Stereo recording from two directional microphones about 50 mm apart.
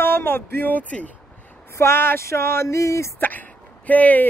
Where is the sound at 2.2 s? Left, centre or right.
Left.